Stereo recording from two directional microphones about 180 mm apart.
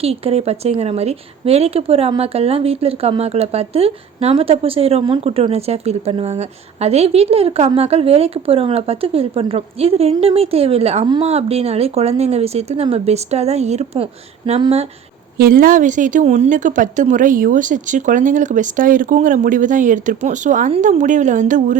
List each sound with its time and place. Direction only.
0.0 s a woman's voice: 35° right (ahead or behind)
15.4 s speech: 55° right (ahead or behind)